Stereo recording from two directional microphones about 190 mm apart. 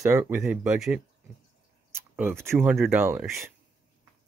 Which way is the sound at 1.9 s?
10° right (ahead or behind).